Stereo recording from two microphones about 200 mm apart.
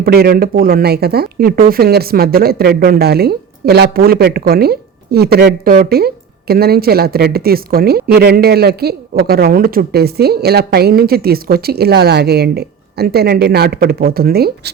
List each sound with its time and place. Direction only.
0.0 s speech: 50° right (ahead or behind)